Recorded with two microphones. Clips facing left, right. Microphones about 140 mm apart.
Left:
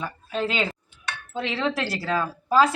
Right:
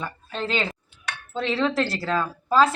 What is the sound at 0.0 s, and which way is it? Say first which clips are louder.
Speech: left 3 dB; 10° left (ahead or behind).